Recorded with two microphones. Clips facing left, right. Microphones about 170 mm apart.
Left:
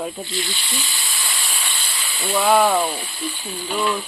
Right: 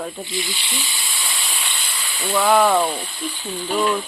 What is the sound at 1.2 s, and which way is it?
Hiss, centre (ahead or behind).